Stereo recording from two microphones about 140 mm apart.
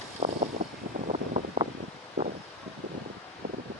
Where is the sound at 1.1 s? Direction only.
60° right (ahead or behind).